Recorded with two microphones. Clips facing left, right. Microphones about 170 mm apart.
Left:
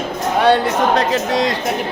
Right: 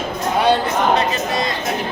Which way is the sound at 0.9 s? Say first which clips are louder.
Left 2 dB; 90° left.